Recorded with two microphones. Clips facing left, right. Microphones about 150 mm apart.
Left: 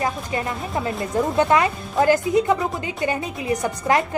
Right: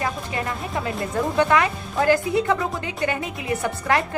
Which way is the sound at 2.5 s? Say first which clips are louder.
Left 1 dB; centre (ahead or behind).